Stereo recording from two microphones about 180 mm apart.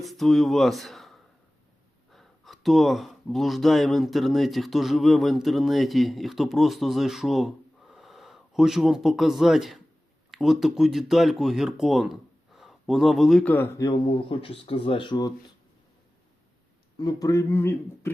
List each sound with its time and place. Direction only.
0.0 s speech: centre (ahead or behind); by 15.3 s 25° left (ahead or behind)
17.0 s speech: 20° left (ahead or behind)